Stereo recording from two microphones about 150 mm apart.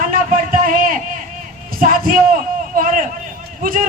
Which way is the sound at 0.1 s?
65° right (ahead or behind).